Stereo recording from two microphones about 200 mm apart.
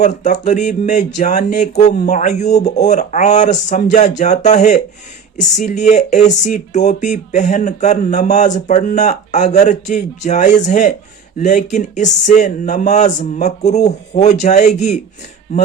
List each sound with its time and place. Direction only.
0.0 s speech: 35° left (ahead or behind)